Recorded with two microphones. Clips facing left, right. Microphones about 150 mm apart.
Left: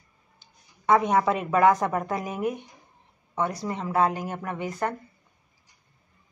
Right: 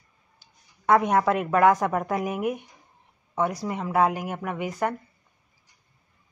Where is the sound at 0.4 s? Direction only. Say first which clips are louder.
Left 2 dB; 10° right (ahead or behind).